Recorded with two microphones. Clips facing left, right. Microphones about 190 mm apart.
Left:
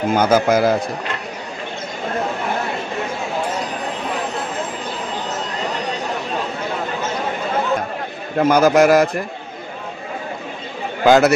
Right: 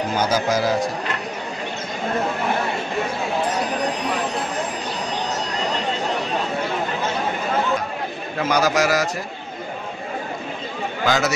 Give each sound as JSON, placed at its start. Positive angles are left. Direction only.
{"t": 0.1, "sound": "a man's voice", "side_deg": 55}
{"t": 8.4, "sound": "a man's voice", "side_deg": 50}
{"t": 11.1, "sound": "a man's voice", "side_deg": 55}